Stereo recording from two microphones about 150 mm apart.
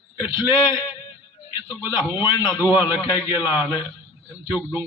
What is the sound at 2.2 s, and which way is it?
Speech, 30° left (ahead or behind).